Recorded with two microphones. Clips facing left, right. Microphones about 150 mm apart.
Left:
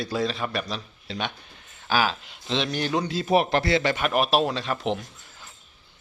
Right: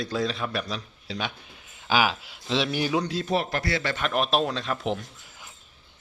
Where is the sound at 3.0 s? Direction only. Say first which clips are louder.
Left 2 dB; 5° left (ahead or behind).